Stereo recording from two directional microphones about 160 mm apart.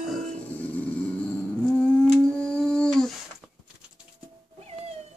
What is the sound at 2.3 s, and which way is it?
Humming, 5° left (ahead or behind).